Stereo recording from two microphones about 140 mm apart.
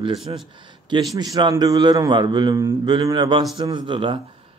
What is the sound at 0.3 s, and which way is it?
Speech, 30° right (ahead or behind).